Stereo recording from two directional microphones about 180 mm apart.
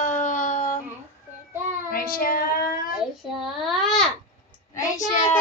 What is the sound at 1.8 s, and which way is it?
Child singing, 55° left (ahead or behind).